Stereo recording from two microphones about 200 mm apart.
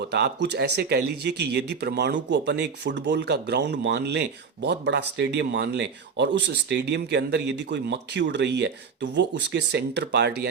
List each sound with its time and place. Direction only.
0.1 s speech: 55° right (ahead or behind)